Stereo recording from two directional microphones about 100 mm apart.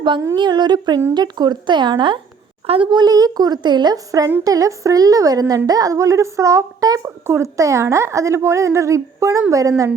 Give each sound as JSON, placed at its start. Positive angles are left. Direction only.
{"t": 0.3, "sound": "speech", "side_deg": -45}
{"t": 2.6, "sound": "a woman's voice", "side_deg": -70}
{"t": 2.9, "sound": "a woman's voice", "side_deg": -45}